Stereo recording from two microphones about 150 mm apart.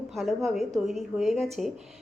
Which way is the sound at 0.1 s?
Centre (ahead or behind).